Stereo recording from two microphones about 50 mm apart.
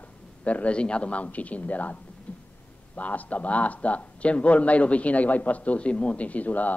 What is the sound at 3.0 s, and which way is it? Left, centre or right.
Speech, left.